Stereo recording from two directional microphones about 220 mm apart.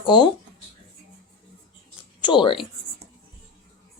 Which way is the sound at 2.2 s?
20° left (ahead or behind).